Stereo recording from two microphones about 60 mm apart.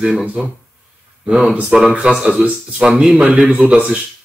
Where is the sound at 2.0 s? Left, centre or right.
Centre.